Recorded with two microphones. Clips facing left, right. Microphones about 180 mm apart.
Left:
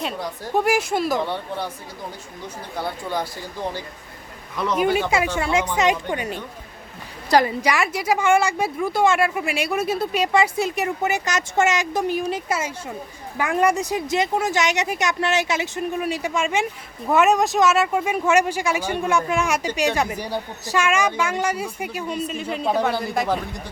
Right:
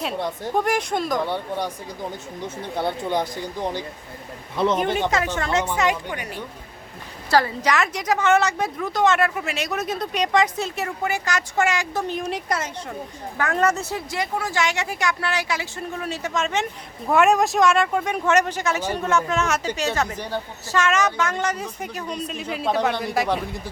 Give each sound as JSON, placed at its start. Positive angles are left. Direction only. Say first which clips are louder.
{"t": 0.5, "sound": "speech", "louder": "left 3 dB", "side_deg": 5}
{"t": 1.2, "sound": "speech", "louder": "right 1 dB", "side_deg": -15}
{"t": 2.6, "sound": "speech", "louder": "right 3 dB", "side_deg": -25}
{"t": 4.9, "sound": "a woman's voice", "louder": "left 1 dB", "side_deg": 10}